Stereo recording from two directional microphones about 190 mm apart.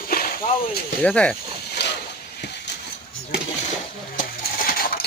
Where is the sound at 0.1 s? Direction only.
50° left (ahead or behind).